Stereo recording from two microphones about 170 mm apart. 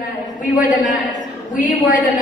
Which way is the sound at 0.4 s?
50° left (ahead or behind).